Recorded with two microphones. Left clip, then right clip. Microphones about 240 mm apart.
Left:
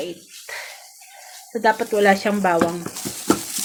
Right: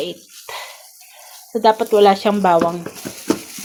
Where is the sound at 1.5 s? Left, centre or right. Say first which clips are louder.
Right 5 dB; centre.